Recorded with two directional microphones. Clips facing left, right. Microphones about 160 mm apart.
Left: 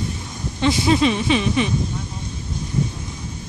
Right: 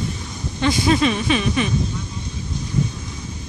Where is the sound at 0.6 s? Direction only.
25° left (ahead or behind).